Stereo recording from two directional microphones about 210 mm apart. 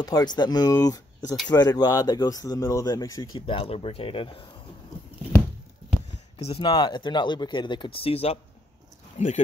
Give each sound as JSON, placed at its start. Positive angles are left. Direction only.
{"t": 0.0, "sound": "speech", "side_deg": 20}
{"t": 6.3, "sound": "speech", "side_deg": 25}